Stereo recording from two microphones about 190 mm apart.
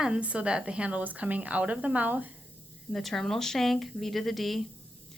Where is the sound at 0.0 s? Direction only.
5° right (ahead or behind).